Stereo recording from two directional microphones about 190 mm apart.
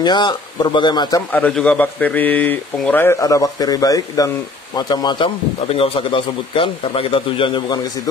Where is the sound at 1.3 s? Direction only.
5° left (ahead or behind).